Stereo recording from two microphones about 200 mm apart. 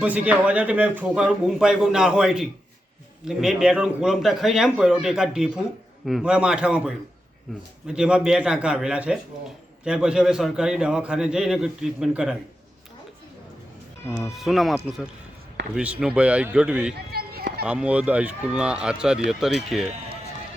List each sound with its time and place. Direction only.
0.0 s a man's voice: 5° right (ahead or behind)
14.1 s a man's voice: 10° left (ahead or behind)
17.1 s a sound: 50° right (ahead or behind)
17.6 s a man's voice: 5° right (ahead or behind)